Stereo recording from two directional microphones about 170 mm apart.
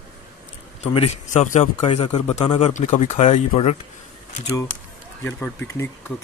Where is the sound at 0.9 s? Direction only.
40° left (ahead or behind).